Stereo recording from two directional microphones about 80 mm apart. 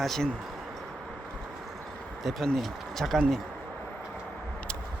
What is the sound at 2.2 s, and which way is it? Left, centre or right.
Speech, centre.